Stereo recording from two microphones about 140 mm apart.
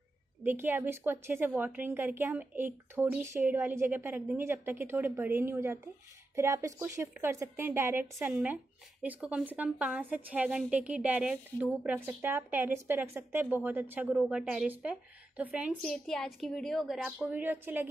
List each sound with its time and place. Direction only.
0.4 s a woman's voice: 15° right (ahead or behind)
15.7 s a woman's voice: 5° left (ahead or behind); by 17.8 s 15° right (ahead or behind)